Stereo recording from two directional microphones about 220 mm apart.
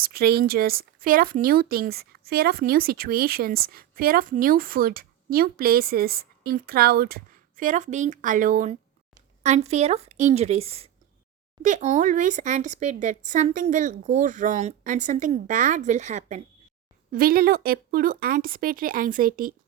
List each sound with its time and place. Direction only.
0.0 s speech: 45° right (ahead or behind)